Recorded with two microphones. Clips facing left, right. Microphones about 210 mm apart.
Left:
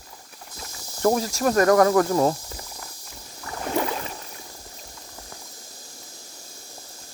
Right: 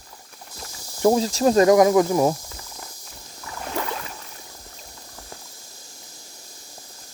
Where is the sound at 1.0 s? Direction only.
25° right (ahead or behind).